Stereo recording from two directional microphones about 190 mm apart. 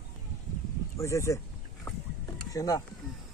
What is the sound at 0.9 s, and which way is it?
Speech, 15° left (ahead or behind).